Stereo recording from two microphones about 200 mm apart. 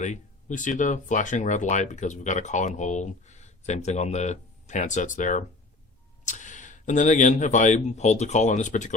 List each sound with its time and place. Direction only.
0.0 s speech: 40° left (ahead or behind)